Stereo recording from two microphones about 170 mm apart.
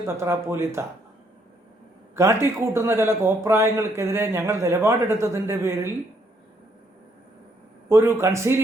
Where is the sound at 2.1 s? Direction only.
15° right (ahead or behind).